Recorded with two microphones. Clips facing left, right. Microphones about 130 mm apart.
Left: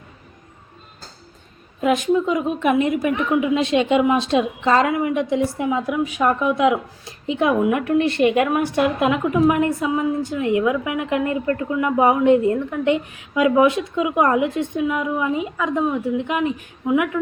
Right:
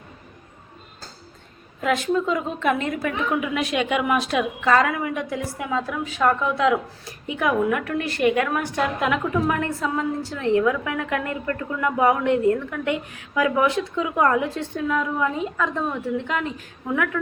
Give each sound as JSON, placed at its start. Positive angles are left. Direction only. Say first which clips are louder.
{"t": 1.8, "sound": "a woman's voice", "louder": "left 4 dB", "side_deg": 15}